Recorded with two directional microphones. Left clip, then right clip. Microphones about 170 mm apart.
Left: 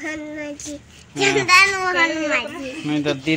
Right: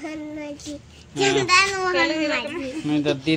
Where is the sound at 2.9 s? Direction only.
20° left (ahead or behind).